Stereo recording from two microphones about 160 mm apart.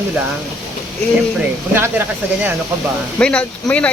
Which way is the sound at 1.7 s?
15° right (ahead or behind).